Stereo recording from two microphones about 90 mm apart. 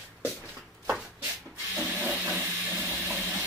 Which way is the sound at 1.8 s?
15° right (ahead or behind).